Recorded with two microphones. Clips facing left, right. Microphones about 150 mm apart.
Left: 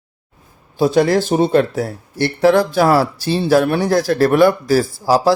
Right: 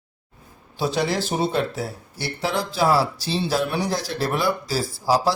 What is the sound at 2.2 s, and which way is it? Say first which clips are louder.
Speech: left 13 dB; 60° left (ahead or behind).